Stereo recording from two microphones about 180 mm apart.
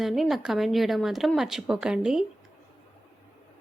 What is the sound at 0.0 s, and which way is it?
A woman's voice, centre (ahead or behind).